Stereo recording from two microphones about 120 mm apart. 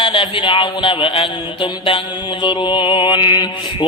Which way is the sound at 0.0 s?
45° left (ahead or behind).